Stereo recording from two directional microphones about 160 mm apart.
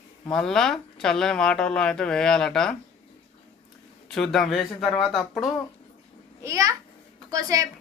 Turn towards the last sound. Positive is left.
turn(degrees=-20)  # may be behind; listen again after turning